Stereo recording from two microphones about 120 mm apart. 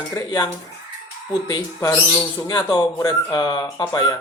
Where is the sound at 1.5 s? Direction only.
35° left (ahead or behind).